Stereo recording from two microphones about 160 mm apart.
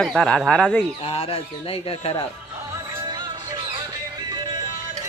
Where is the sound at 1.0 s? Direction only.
35° left (ahead or behind).